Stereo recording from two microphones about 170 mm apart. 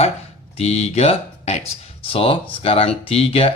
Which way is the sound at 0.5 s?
35° left (ahead or behind).